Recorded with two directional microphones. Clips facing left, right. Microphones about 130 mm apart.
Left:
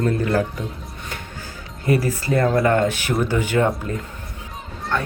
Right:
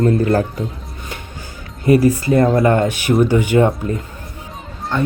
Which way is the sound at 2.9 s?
15° right (ahead or behind).